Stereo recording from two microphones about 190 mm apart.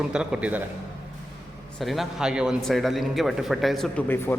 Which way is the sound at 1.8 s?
Centre (ahead or behind).